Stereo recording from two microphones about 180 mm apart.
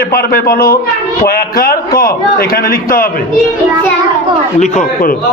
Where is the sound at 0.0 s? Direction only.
55° left (ahead or behind).